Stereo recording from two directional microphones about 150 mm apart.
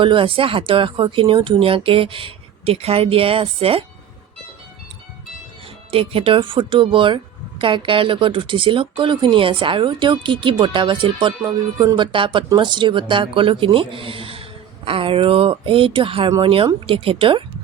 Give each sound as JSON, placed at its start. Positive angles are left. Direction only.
{"t": 0.0, "sound": "speech", "side_deg": -35}
{"t": 5.9, "sound": "speech", "side_deg": -40}
{"t": 11.4, "sound": "speech", "side_deg": -20}
{"t": 11.9, "sound": "speech", "side_deg": -35}